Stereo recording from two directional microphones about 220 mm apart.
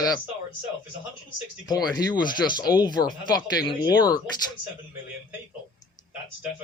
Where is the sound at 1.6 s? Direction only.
20° left (ahead or behind).